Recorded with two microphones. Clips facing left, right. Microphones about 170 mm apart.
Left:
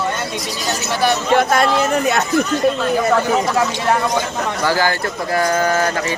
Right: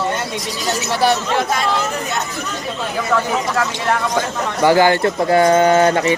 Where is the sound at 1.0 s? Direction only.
30° right (ahead or behind).